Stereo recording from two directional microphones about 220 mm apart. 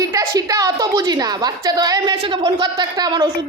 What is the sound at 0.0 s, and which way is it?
A woman's voice, 15° right (ahead or behind).